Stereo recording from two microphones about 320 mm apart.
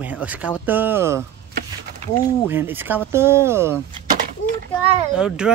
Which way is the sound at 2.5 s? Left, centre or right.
Centre.